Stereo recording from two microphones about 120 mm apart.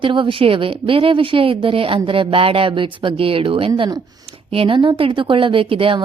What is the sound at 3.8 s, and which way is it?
Speech, 35° right (ahead or behind).